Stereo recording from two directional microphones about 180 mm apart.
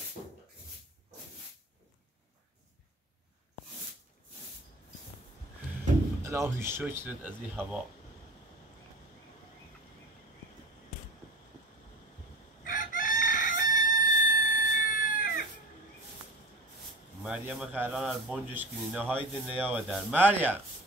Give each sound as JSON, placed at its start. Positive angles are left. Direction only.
{"t": 6.2, "sound": "speech", "side_deg": -15}
{"t": 12.6, "sound": "crowing", "side_deg": 45}
{"t": 17.2, "sound": "speech", "side_deg": -5}